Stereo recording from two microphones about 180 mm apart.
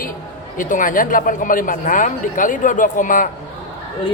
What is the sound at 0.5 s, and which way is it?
Speech, 50° left (ahead or behind).